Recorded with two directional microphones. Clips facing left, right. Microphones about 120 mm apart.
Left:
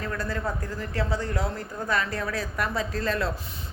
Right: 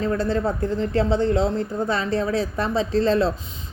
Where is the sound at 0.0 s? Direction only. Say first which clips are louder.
Right 8 dB; 25° right (ahead or behind).